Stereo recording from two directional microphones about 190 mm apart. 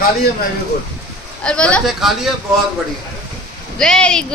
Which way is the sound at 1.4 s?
5° left (ahead or behind).